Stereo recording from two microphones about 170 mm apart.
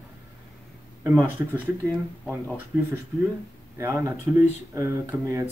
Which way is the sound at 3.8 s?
15° right (ahead or behind).